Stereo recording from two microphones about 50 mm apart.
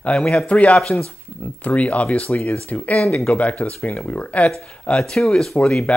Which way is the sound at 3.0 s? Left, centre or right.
Centre.